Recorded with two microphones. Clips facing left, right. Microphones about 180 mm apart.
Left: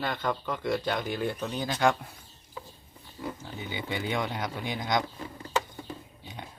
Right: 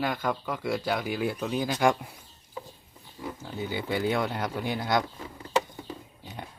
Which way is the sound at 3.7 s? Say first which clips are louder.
Right 4 dB; 5° right (ahead or behind).